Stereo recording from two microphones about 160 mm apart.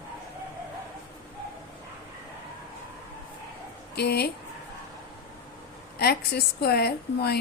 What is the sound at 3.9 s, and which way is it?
Speech, 85° left.